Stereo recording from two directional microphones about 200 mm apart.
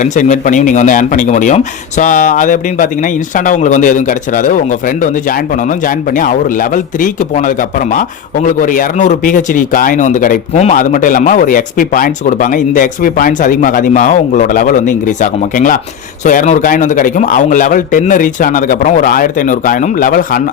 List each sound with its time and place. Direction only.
0.0 s speech: 35° left (ahead or behind)